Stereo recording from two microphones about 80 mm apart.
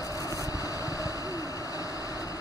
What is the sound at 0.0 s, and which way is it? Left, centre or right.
Vehicle, left.